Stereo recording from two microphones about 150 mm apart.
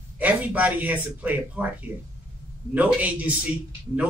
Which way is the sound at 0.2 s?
10° right (ahead or behind).